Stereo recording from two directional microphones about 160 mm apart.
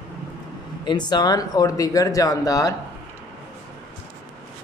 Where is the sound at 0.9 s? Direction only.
25° left (ahead or behind).